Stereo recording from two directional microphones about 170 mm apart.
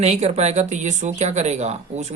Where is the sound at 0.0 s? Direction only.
40° right (ahead or behind).